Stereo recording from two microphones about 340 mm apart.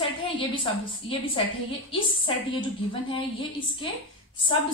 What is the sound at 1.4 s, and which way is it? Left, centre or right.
A woman's voice, centre.